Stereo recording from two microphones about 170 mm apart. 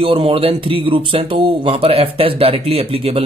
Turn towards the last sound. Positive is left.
turn(degrees=-35)  # may be behind; listen again after turning